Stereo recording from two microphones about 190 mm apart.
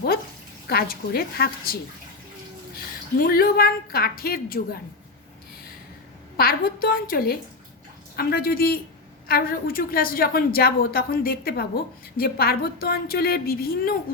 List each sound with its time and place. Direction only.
0.7 s a woman's voice: 55° left (ahead or behind)
3.2 s a woman's voice: 50° left (ahead or behind)
6.3 s a woman's voice: 50° left (ahead or behind)